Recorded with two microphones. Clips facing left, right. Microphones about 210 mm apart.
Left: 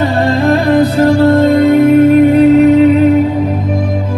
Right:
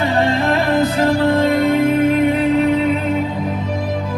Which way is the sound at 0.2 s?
40° left (ahead or behind).